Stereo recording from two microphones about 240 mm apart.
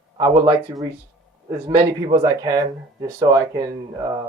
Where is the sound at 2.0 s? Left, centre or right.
Centre.